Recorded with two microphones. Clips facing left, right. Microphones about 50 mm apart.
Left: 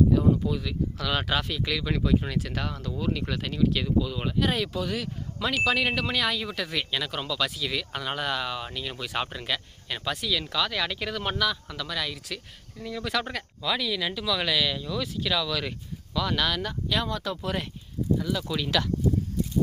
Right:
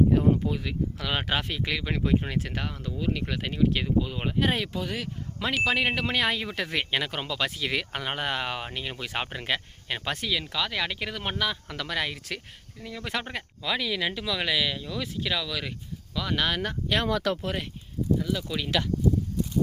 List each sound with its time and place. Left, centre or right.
0.4 s speech: right
10.5 s speech: centre
11.7 s speech: right
12.8 s speech: centre
13.1 s speech: right; by 16.4 s centre
16.4 s speech: right
16.6 s speech: right
18.2 s speech: centre